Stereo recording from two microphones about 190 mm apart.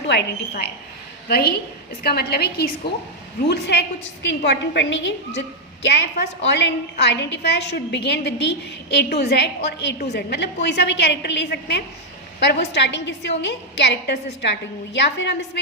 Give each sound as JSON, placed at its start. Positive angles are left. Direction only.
{"t": 0.1, "sound": "a woman's voice", "side_deg": 60}